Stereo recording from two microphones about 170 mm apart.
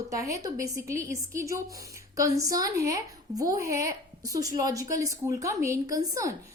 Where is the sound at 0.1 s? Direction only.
20° right (ahead or behind).